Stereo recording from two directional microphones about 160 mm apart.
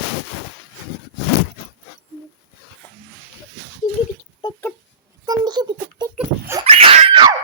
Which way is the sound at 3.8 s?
50° left (ahead or behind).